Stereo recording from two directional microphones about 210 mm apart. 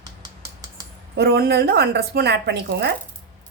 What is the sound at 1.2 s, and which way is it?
A woman's voice, 50° right (ahead or behind).